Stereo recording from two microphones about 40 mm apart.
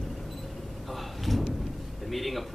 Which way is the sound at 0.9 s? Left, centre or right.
Centre.